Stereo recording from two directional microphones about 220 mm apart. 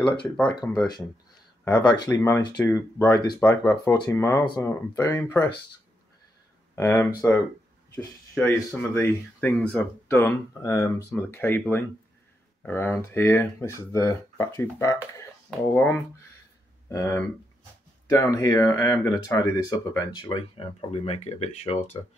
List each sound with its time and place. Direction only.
0.0 s speech: 20° left (ahead or behind)
6.7 s speech: 10° left (ahead or behind)
18.2 s speech: 15° left (ahead or behind)